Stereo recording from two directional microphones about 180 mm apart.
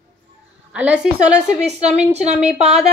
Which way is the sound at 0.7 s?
5° right (ahead or behind).